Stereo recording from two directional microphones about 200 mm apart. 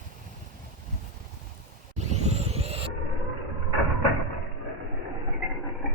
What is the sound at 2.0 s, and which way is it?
Vehicle, 35° right (ahead or behind).